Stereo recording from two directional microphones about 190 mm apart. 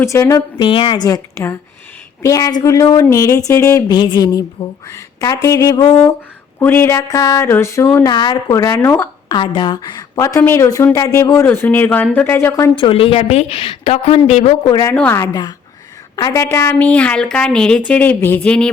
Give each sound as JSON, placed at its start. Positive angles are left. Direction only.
{"t": 0.0, "sound": "a woman's voice", "side_deg": 15}
{"t": 12.7, "sound": "a woman's voice", "side_deg": 30}
{"t": 14.7, "sound": "a woman's voice", "side_deg": 20}
{"t": 14.9, "sound": "speech", "side_deg": 10}